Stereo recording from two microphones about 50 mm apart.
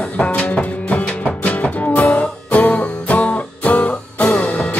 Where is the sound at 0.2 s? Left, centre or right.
Left.